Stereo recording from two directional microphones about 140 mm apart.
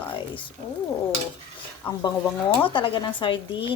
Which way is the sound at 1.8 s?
40° left (ahead or behind).